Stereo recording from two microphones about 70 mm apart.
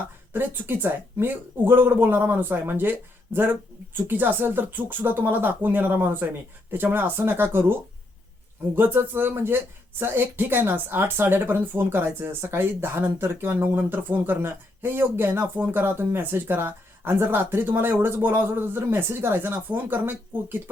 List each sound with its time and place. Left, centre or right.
0.3 s speech: right